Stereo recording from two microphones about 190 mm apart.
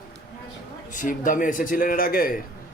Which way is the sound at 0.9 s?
45° left (ahead or behind).